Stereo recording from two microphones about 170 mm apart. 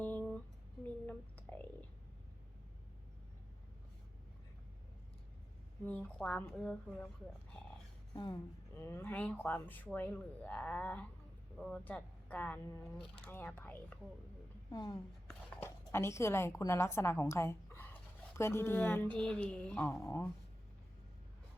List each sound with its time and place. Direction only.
0.0 s a sound: 10° left (ahead or behind)
5.8 s speech: 10° left (ahead or behind)
8.1 s speech: 20° left (ahead or behind)
14.7 s a woman's voice: 25° left (ahead or behind)
15.3 s a woman's voice: 10° left (ahead or behind)